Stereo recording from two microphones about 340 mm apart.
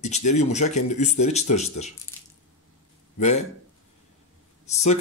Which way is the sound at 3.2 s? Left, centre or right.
Centre.